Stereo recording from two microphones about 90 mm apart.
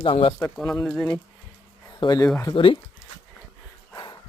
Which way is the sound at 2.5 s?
70° left (ahead or behind).